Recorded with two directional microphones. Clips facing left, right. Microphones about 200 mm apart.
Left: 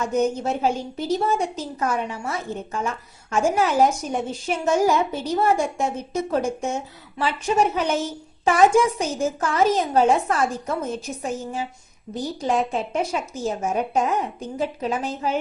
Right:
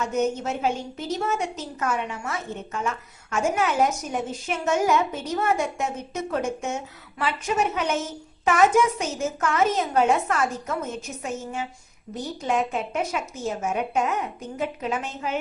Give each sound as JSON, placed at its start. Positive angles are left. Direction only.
{"t": 0.1, "sound": "a woman's voice", "side_deg": 35}
{"t": 12.1, "sound": "a woman's voice", "side_deg": 35}